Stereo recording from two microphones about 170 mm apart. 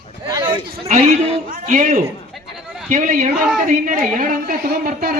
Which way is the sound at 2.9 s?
50° right (ahead or behind).